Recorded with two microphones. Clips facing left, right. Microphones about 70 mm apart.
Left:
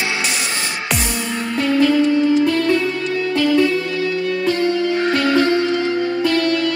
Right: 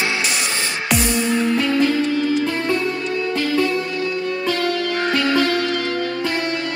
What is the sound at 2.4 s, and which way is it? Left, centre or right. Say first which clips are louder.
Music: left 4 dB; right.